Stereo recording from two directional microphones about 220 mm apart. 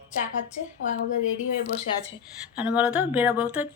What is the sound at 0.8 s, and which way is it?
Speech, 35° left (ahead or behind).